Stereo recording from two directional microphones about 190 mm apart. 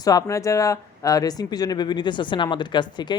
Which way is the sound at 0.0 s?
20° left (ahead or behind).